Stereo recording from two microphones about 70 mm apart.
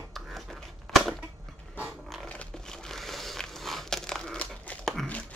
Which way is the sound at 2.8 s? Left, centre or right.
Centre.